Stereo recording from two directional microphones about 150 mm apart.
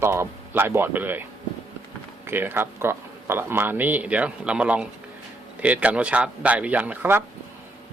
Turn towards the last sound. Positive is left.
turn(degrees=-15)  # may be behind; listen again after turning